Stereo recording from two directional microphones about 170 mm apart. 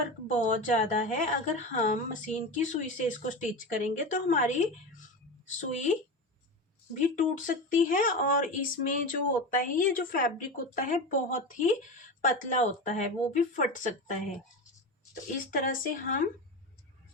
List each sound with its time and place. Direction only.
0.3 s a woman's voice: 45° left (ahead or behind)
15.4 s a woman's voice: 50° left (ahead or behind)